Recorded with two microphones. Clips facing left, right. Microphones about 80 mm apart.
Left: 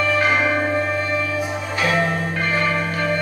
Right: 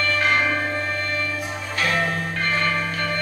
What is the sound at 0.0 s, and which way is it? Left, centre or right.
Music, centre.